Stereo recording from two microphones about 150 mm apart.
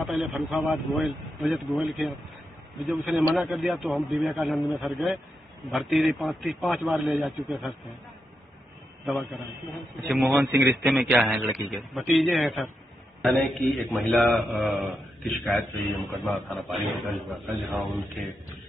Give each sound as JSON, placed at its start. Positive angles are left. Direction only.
{"t": 0.0, "sound": "a sound", "side_deg": 0}
{"t": 0.5, "sound": "a man's voice", "side_deg": 0}
{"t": 9.0, "sound": "a man's voice", "side_deg": 0}
{"t": 10.4, "sound": "a man's voice", "side_deg": -25}
{"t": 10.8, "sound": "a man's voice", "side_deg": 0}